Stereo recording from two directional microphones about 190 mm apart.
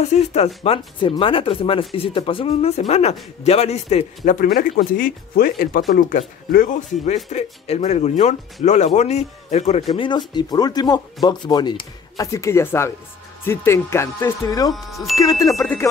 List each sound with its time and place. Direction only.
0.0 s a man's voice: 35° left (ahead or behind)
9.8 s speech: 25° left (ahead or behind)